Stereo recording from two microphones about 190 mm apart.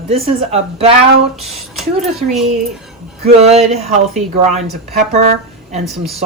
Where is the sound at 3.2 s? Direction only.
35° right (ahead or behind).